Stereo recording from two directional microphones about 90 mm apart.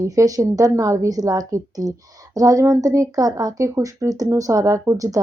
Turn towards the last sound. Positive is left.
turn(degrees=-40)  # may be behind; listen again after turning